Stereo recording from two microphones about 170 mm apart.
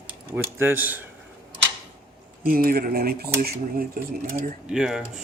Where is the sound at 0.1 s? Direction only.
10° right (ahead or behind).